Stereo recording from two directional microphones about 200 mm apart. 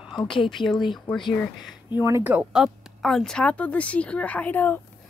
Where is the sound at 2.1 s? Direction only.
10° right (ahead or behind); by 4.8 s 10° left (ahead or behind).